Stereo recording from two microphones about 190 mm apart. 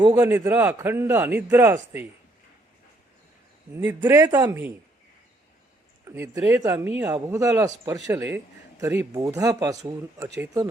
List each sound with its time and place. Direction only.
0.1 s a man's voice: 10° right (ahead or behind)
3.8 s a man's voice: 10° right (ahead or behind)
6.1 s a man's voice: 15° right (ahead or behind)